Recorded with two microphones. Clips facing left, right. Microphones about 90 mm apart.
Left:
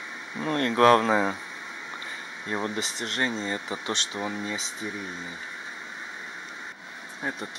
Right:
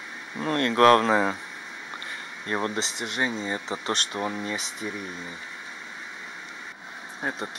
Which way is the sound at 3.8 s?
50° right (ahead or behind).